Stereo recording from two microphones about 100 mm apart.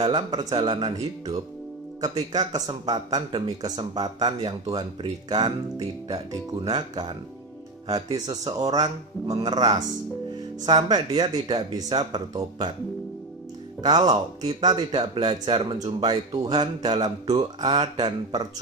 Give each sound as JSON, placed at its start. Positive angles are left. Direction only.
{"t": 0.0, "sound": "speech", "side_deg": -45}
{"t": 0.9, "sound": "speech", "side_deg": -35}
{"t": 10.9, "sound": "speech", "side_deg": -45}
{"t": 13.8, "sound": "speech", "side_deg": -45}